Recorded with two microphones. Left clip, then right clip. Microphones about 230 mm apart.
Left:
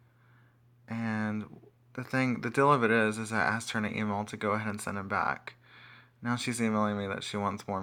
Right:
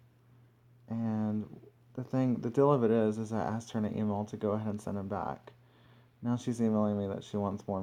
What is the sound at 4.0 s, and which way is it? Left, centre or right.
Speech, left.